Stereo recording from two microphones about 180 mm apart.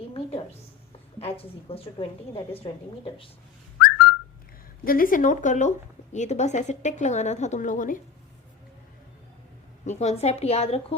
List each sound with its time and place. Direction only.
0.1 s a sound: 30° left (ahead or behind)
1.2 s a woman's voice: 30° left (ahead or behind)
4.9 s a woman's voice: 50° left (ahead or behind)
9.8 s a woman's voice: 40° left (ahead or behind)